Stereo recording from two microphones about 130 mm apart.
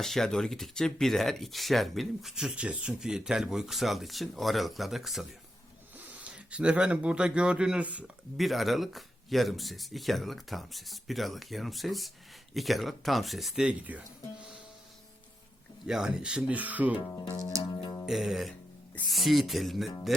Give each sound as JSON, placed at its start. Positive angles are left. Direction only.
{"t": 0.0, "sound": "speech", "side_deg": 5}
{"t": 15.9, "sound": "speech", "side_deg": -5}
{"t": 17.1, "sound": "speech", "side_deg": 25}
{"t": 18.0, "sound": "speech", "side_deg": 0}